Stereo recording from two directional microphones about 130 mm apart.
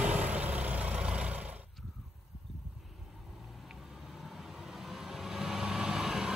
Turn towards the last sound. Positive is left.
turn(degrees=-5)  # may be behind; listen again after turning